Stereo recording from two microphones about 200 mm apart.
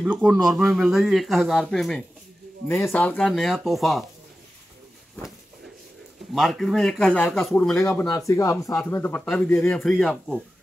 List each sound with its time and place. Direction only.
0.0 s speech: 5° right (ahead or behind)
2.7 s speech: 10° left (ahead or behind)
6.3 s speech: centre (ahead or behind)
8.3 s speech: 15° left (ahead or behind)